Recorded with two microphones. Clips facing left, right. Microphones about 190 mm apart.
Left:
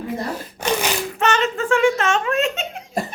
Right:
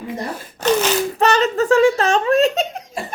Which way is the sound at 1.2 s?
35° right (ahead or behind).